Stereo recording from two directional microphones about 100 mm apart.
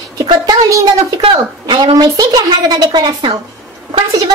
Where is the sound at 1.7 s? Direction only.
45° right (ahead or behind).